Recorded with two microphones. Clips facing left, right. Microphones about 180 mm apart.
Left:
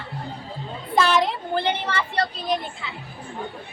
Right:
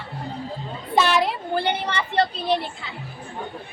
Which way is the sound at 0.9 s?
5° right (ahead or behind).